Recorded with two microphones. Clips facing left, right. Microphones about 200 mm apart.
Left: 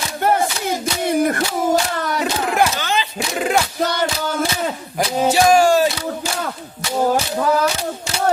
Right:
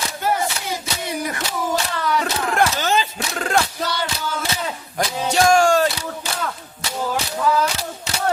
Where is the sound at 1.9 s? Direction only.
45° left (ahead or behind).